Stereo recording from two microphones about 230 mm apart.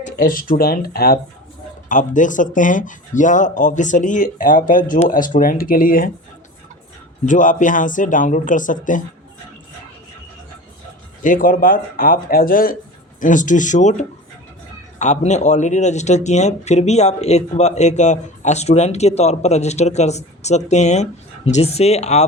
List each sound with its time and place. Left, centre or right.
0.0 s speech: left
7.3 s speech: left
11.2 s speech: left